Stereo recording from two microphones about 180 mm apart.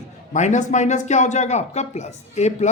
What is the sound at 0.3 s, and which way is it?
A man's voice, 40° left (ahead or behind).